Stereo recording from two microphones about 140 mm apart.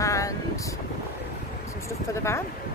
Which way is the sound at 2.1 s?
20° left (ahead or behind).